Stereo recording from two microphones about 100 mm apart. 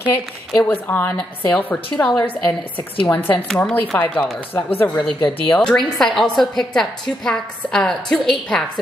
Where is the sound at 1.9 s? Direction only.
5° left (ahead or behind).